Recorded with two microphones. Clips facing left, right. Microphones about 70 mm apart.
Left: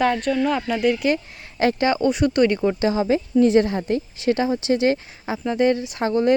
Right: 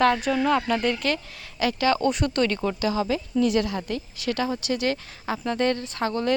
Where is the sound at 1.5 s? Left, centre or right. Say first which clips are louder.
Left 5 dB; left.